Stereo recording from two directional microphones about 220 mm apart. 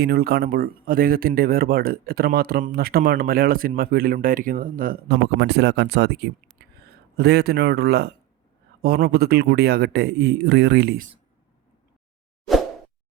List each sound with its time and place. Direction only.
0.0 s a man's voice: 45° right (ahead or behind)